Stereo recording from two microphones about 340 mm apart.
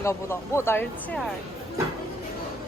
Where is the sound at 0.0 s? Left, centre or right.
Centre.